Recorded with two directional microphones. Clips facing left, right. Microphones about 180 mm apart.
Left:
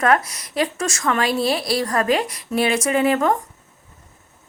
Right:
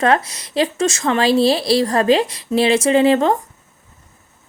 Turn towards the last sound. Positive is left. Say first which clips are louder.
# right 4 dB
turn(degrees=-25)  # may be behind; listen again after turning